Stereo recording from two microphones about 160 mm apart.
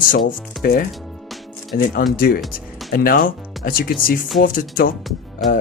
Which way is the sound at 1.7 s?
60° left (ahead or behind).